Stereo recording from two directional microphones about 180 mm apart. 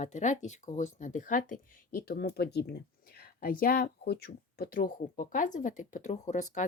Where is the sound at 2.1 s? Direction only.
60° left (ahead or behind).